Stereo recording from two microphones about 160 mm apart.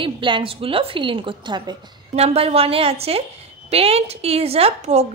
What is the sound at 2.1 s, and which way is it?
A woman's voice, 40° right (ahead or behind).